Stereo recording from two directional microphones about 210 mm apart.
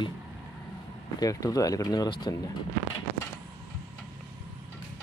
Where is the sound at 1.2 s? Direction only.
15° left (ahead or behind).